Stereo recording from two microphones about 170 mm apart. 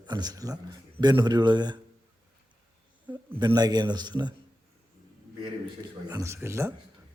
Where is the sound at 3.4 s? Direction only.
25° right (ahead or behind).